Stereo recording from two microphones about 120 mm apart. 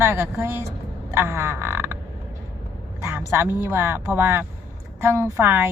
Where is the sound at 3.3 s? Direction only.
20° right (ahead or behind).